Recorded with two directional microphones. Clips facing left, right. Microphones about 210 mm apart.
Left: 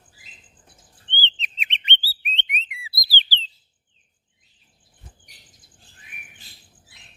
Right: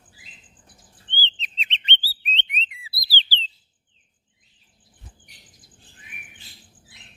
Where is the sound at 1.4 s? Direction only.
15° left (ahead or behind).